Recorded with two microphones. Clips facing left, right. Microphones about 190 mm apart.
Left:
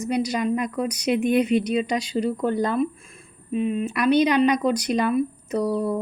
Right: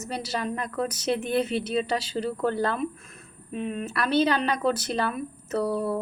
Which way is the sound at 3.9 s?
15° left (ahead or behind).